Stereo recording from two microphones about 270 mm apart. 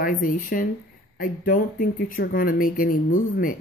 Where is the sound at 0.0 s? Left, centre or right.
Left.